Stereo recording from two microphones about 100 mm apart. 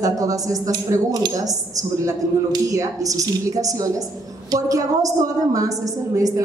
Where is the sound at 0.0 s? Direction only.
35° right (ahead or behind).